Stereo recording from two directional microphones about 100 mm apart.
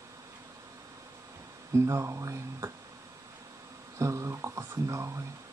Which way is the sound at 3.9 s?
30° right (ahead or behind).